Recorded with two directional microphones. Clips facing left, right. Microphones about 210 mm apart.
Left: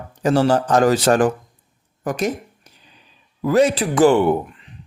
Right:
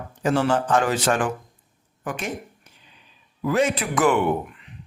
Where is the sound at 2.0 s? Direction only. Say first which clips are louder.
Left 7 dB; 40° left (ahead or behind).